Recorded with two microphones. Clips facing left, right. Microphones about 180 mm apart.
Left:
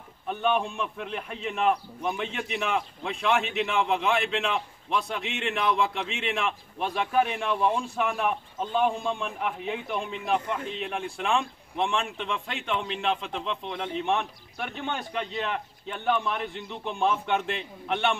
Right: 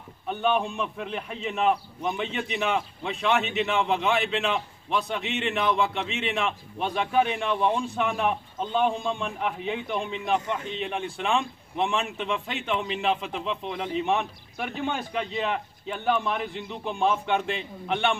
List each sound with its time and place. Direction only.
0.3 s a man's voice: centre (ahead or behind)